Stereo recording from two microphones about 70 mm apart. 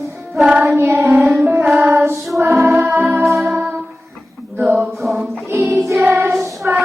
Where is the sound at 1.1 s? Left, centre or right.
Centre.